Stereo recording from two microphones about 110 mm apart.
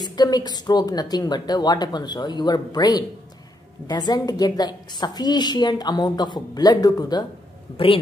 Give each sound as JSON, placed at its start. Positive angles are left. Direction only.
{"t": 0.0, "sound": "a woman's voice", "side_deg": 40}
{"t": 7.7, "sound": "a man's voice", "side_deg": 55}